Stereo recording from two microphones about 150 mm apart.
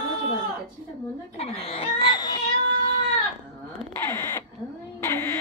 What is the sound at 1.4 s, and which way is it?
A child's voice, 40° left (ahead or behind).